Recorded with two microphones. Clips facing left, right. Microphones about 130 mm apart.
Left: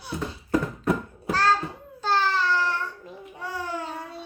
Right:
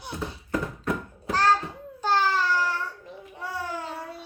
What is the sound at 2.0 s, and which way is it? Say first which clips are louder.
Babbling: even; 15° right (ahead or behind).